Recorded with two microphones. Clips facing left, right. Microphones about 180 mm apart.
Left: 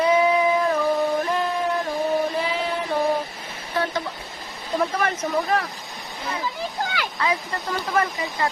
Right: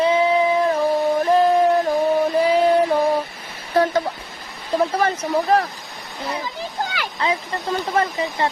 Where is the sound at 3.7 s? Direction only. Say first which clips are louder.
Right 7 dB; 40° right (ahead or behind).